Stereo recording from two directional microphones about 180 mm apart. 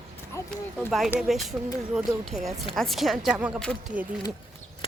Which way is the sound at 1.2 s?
Centre (ahead or behind).